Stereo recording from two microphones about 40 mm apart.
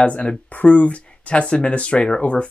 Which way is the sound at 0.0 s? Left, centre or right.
Left.